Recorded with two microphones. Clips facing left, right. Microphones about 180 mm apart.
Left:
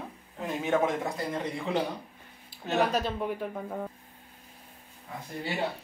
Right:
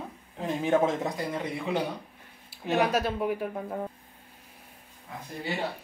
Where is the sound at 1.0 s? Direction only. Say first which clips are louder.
Right 1 dB; 15° right (ahead or behind).